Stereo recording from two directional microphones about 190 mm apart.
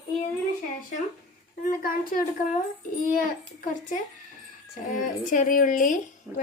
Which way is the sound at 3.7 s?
40° left (ahead or behind).